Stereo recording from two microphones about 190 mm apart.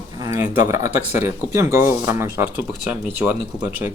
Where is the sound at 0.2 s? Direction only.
15° right (ahead or behind).